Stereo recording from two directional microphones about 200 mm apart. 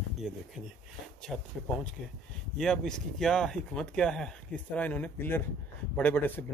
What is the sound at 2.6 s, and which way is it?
Speech, centre (ahead or behind).